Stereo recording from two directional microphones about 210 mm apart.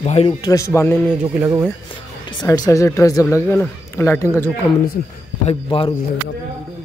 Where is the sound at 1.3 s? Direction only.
10° right (ahead or behind).